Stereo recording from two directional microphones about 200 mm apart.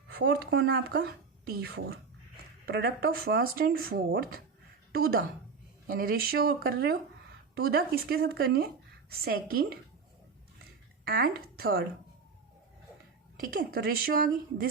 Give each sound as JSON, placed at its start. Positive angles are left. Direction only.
{"t": 0.1, "sound": "a woman's voice", "side_deg": -50}
{"t": 11.0, "sound": "speech", "side_deg": -50}
{"t": 13.4, "sound": "a woman's voice", "side_deg": -45}